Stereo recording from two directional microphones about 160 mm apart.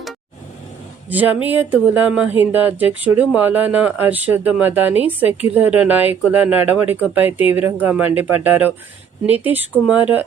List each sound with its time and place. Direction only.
1.1 s speech: 10° right (ahead or behind)